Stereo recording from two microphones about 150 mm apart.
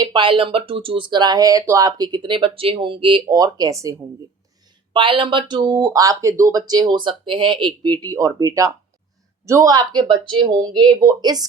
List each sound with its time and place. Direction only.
0.0 s speech: 30° right (ahead or behind)
4.9 s speech: 35° right (ahead or behind)